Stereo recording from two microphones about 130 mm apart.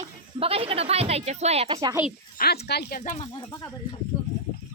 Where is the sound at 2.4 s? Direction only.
90° left.